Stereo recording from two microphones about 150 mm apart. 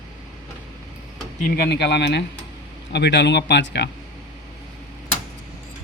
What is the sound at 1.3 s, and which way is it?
Speech, 75° left (ahead or behind).